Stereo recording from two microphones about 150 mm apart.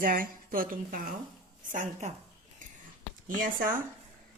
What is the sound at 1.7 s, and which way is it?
Speech, 55° right (ahead or behind).